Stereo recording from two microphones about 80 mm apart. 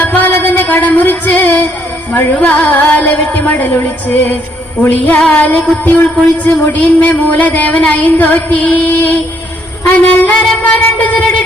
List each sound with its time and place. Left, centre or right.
0.0 s music: left
2.1 s speech: centre